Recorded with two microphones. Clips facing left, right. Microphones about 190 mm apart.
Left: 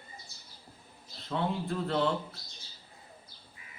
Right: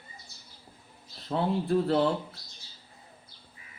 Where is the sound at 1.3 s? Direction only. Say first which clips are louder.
Right 6 dB; 30° right (ahead or behind).